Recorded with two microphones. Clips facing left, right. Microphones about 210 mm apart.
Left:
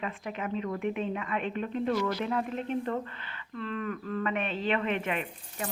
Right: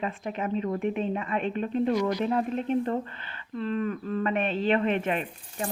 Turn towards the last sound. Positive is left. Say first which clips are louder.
# right 3 dB
turn(degrees=-35)  # may be behind; listen again after turning